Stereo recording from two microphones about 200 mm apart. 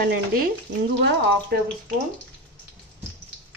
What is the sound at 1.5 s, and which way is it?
Speech, 50° right (ahead or behind).